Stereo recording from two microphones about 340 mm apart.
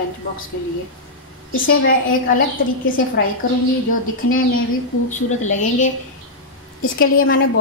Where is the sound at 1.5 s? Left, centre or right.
Left.